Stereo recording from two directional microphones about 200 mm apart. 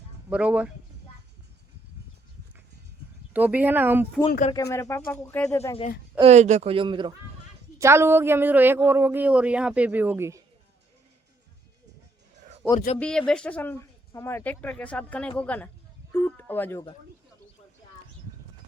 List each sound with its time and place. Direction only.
0.3 s speech: 5° right (ahead or behind)
3.3 s speech: 10° right (ahead or behind)
4.5 s speech: 15° left (ahead or behind)
6.1 s speech: 35° right (ahead or behind)
7.8 s speech: 15° right (ahead or behind)
12.6 s speech: centre (ahead or behind)
16.1 s a sound: 10° left (ahead or behind)